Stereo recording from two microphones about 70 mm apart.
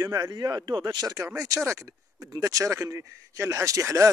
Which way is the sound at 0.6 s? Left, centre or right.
Right.